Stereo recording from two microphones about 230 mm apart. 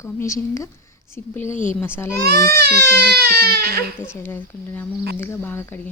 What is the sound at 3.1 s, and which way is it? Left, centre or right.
Speech, right.